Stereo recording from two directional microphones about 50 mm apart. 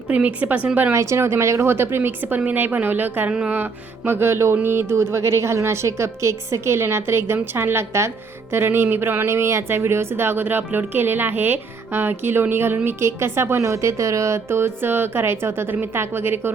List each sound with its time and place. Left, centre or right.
0.1 s a woman's voice: right
0.9 s a woman's voice: right
4.5 s a woman's voice: right
9.2 s speech: right
13.6 s a woman's voice: right